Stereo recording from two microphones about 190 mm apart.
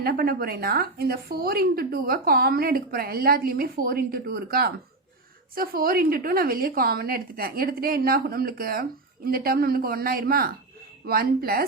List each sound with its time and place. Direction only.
0.0 s a woman's voice: 50° right (ahead or behind)